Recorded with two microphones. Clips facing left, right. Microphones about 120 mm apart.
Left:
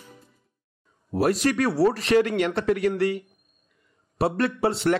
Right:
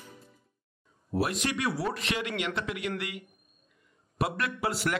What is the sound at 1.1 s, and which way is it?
A man's voice, 40° left (ahead or behind).